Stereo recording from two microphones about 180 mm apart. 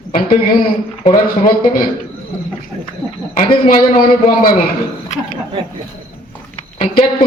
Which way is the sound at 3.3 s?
45° left (ahead or behind).